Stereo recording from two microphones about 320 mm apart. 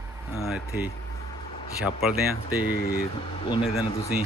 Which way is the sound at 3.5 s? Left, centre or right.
Centre.